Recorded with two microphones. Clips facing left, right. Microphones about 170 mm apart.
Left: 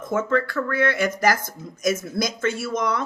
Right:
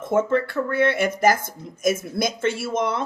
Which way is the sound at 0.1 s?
25° right (ahead or behind).